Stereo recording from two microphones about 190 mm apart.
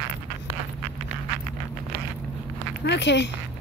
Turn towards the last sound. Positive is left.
turn(degrees=65)  # may be behind; listen again after turning